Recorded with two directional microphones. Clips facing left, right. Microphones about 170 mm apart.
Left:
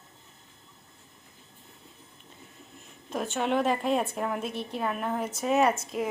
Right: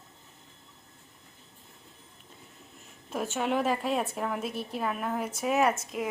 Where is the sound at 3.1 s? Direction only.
5° right (ahead or behind).